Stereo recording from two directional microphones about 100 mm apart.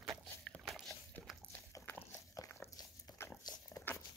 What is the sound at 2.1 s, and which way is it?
Dog, 30° left (ahead or behind).